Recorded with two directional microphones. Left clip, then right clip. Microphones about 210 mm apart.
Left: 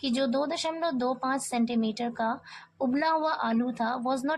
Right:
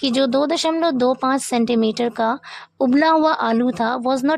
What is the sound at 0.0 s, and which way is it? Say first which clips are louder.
Speech: right 10 dB; 45° right (ahead or behind).